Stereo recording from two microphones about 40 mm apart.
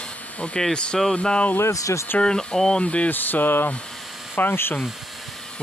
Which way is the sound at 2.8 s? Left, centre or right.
Left.